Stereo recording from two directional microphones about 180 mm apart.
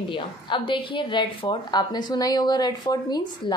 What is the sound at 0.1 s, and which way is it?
A woman's voice, 30° left (ahead or behind).